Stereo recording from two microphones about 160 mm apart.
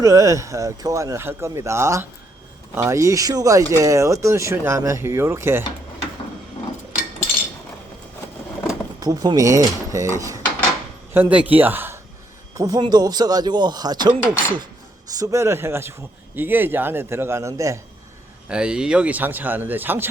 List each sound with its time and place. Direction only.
0.0 s speech: 20° right (ahead or behind)
9.0 s speech: 25° right (ahead or behind)
11.1 s speech: 10° right (ahead or behind)
18.4 s speech: 5° right (ahead or behind)